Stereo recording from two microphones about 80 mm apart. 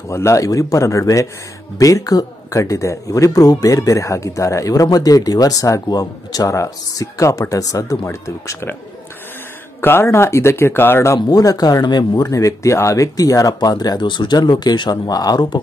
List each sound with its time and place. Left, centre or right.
0.1 s speech: left
6.5 s speech: left
9.8 s speech: left
11.2 s speech: left
12.3 s speech: left